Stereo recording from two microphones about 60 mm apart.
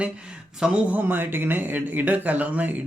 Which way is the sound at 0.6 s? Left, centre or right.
Centre.